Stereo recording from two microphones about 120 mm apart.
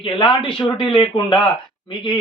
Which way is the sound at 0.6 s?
45° left (ahead or behind).